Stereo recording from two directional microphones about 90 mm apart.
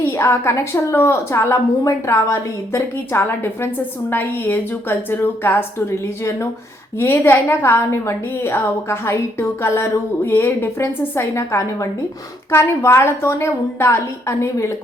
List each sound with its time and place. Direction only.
0.0 s a woman's voice: 30° left (ahead or behind)